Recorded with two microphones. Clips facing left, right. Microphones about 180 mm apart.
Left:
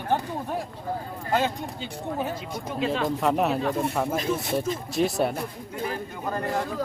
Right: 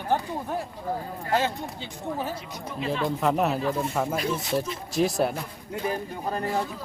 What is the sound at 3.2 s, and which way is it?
Speech, centre (ahead or behind).